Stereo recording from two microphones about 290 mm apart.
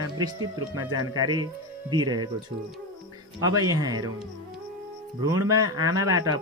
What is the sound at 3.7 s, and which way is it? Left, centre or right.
Speech, centre.